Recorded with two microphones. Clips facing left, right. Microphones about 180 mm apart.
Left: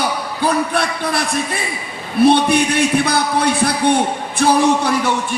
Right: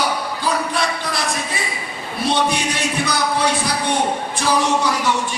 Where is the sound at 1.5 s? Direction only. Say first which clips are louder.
Left 2 dB; 55° left (ahead or behind).